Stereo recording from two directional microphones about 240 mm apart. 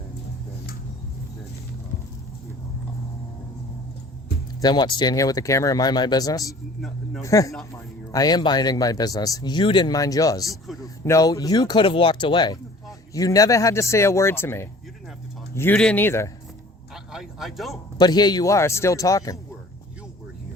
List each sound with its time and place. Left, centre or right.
4.6 s speech: centre
6.4 s speech: centre
7.2 s speech: centre
10.4 s speech: centre
10.8 s speech: centre
16.9 s speech: centre
17.9 s speech: centre